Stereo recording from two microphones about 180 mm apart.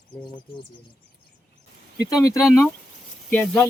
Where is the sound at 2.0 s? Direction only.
20° left (ahead or behind).